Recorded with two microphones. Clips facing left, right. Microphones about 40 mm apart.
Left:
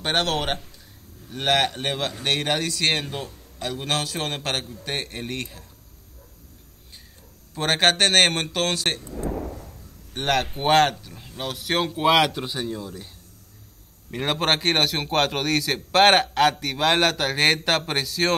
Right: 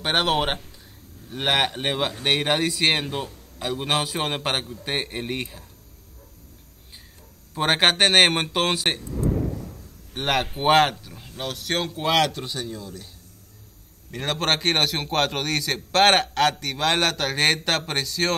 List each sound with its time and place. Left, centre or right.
0.0 s a man's voice: centre
7.5 s a man's voice: centre
10.1 s speech: centre
14.1 s a man's voice: centre